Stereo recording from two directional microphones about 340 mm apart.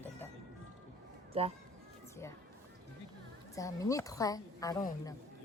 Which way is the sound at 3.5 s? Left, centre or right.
Centre.